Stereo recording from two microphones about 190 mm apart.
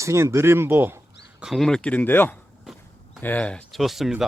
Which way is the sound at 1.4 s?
Centre (ahead or behind).